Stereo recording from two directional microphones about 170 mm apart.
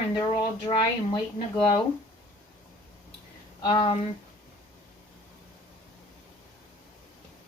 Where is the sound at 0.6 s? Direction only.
25° left (ahead or behind).